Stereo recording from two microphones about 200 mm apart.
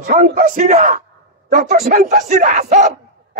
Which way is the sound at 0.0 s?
40° right (ahead or behind).